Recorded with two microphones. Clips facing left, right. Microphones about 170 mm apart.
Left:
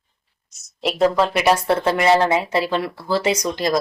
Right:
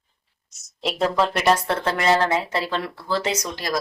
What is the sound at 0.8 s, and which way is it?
Speech, 5° left (ahead or behind).